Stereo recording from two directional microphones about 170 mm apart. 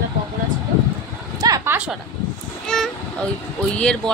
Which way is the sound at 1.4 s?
20° right (ahead or behind).